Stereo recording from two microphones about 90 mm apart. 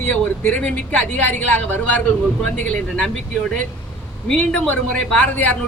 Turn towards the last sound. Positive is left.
turn(degrees=15)  # may be behind; listen again after turning